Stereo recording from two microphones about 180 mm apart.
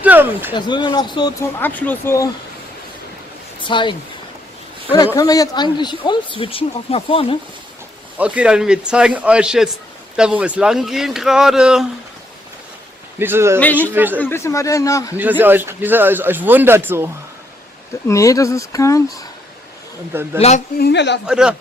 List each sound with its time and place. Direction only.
0.0 s speech: 10° right (ahead or behind)
0.5 s speech: 25° left (ahead or behind)
1.6 s a man's voice: 10° left (ahead or behind)
3.6 s speech: 25° left (ahead or behind)
4.9 s speech: 20° left (ahead or behind)
8.2 s speech: 5° right (ahead or behind)
13.2 s speech: 15° right (ahead or behind)
14.1 s a man's voice: 10° left (ahead or behind)
15.1 s speech: 10° right (ahead or behind)
18.0 s a man's voice: 15° left (ahead or behind)
20.3 s a woman's voice: 35° left (ahead or behind)
20.7 s a man's voice: 70° left (ahead or behind)
21.3 s speech: 5° right (ahead or behind)